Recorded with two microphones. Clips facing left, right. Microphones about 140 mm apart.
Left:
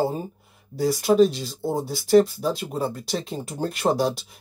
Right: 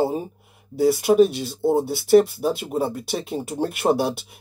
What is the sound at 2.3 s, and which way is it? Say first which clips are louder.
Speech: right 3 dB; 10° right (ahead or behind).